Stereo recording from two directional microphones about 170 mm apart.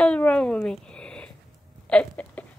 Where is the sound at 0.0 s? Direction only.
5° left (ahead or behind).